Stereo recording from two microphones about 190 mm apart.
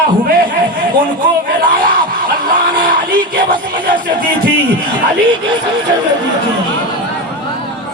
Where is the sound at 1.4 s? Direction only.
50° right (ahead or behind).